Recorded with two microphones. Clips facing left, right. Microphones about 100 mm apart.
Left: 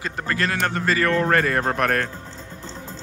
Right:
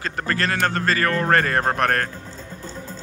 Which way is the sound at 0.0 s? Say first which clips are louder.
Right 1 dB; 15° left (ahead or behind).